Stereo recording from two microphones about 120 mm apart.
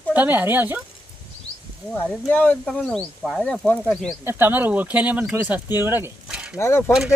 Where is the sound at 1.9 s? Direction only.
15° left (ahead or behind).